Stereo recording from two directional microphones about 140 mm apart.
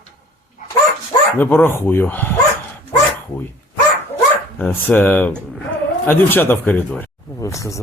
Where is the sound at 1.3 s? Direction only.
15° left (ahead or behind).